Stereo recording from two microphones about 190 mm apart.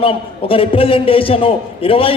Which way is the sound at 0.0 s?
30° left (ahead or behind).